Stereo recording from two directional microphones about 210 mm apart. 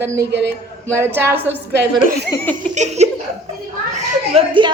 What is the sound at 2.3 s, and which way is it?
Laughter, 10° left (ahead or behind).